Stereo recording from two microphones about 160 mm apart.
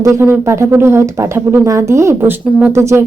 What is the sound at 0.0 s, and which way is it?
Speech, 15° right (ahead or behind).